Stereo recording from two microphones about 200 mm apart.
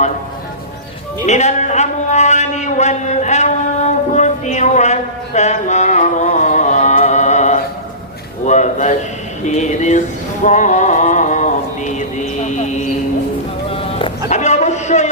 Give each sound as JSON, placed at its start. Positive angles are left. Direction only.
{"t": 1.3, "sound": "speech", "side_deg": 35}
{"t": 4.1, "sound": "a sound", "side_deg": 35}
{"t": 13.7, "sound": "music", "side_deg": 25}